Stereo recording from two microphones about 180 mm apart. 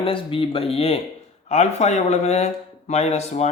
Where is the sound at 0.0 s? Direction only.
30° left (ahead or behind).